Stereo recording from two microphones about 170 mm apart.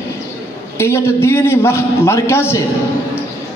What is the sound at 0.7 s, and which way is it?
A man's voice, 15° left (ahead or behind).